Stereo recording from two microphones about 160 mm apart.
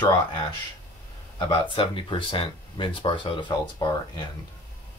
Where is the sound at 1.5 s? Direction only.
30° left (ahead or behind).